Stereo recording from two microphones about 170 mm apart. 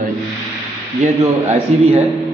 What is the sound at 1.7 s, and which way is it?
Speech, 40° right (ahead or behind).